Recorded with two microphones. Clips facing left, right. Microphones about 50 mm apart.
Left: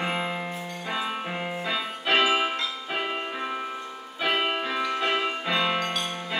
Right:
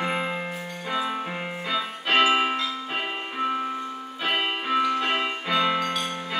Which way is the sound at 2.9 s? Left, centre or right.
Centre.